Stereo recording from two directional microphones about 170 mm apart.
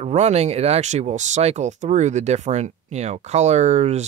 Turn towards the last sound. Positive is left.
turn(degrees=-40)  # may be behind; listen again after turning